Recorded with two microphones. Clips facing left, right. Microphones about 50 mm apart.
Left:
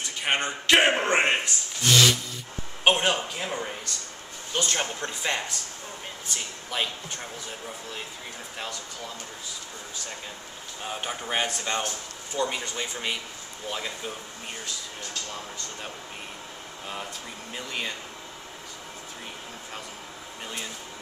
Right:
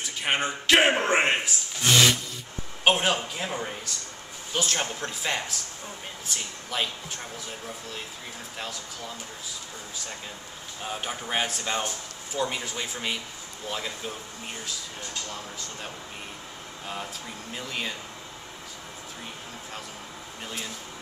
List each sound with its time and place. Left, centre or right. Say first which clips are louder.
0.0 s speech: even; centre
2.8 s speech: even; centre
10.8 s speech: even; centre
16.8 s speech: right 1 dB; centre
20.4 s speech: even; centre